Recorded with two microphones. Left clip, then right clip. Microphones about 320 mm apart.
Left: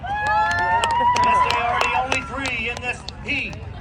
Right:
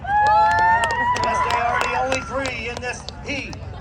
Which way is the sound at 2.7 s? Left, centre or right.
Right.